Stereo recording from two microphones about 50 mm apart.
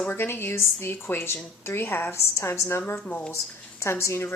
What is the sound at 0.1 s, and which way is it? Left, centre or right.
A woman's voice, left.